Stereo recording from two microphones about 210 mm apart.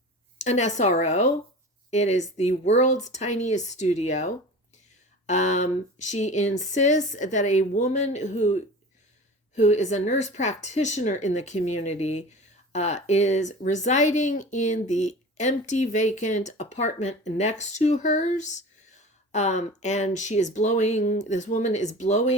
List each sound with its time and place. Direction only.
0.4 s speech: 35° left (ahead or behind)